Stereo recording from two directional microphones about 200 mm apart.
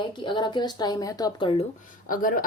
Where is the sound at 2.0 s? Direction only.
45° left (ahead or behind).